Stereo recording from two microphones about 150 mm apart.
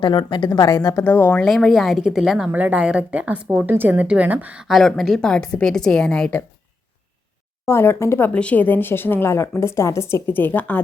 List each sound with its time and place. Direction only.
0.0 s a woman's voice: 30° left (ahead or behind); by 6.4 s 5° left (ahead or behind)
7.6 s speech: 15° left (ahead or behind)